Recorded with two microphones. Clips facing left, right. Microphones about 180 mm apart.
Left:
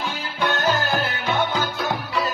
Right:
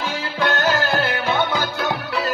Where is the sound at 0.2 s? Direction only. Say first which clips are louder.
Right 2 dB; 80° right.